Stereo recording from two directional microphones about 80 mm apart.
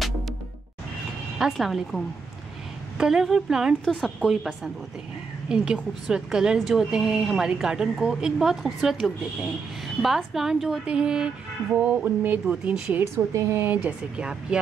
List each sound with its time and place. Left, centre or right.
1.4 s a woman's voice: centre
11.9 s speech: right
13.0 s speech: right
13.7 s a woman's voice: centre